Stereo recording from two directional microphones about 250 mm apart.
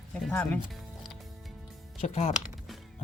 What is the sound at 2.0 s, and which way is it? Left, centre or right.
Speech, left.